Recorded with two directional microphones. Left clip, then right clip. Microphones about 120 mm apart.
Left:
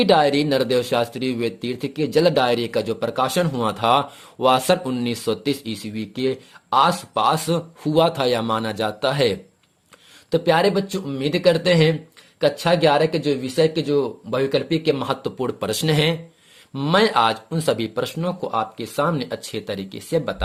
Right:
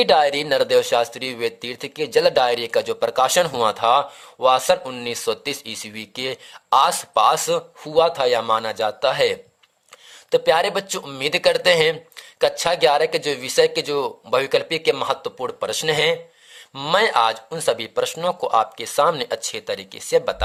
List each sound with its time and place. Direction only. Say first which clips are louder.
0.0 s speech: even; 30° right (ahead or behind)
3.8 s speech: left 3 dB; 25° right (ahead or behind)
7.9 s speech: right 1 dB; 15° right (ahead or behind)
10.3 s speech: even; 35° right (ahead or behind)
15.4 s speech: even; 15° right (ahead or behind)
18.1 s speech: right 5 dB; 45° right (ahead or behind); by 20.1 s 30° right (ahead or behind)